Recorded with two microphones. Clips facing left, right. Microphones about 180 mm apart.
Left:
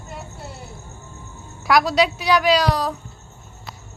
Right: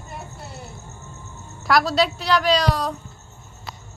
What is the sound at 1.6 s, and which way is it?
A woman's voice, centre (ahead or behind).